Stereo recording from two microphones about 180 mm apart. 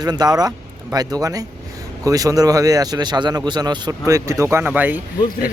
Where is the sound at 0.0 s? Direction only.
20° right (ahead or behind).